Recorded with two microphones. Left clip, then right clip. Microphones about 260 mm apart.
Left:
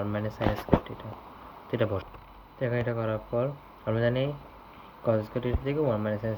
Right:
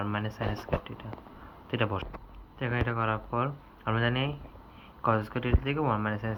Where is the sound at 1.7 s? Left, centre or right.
Centre.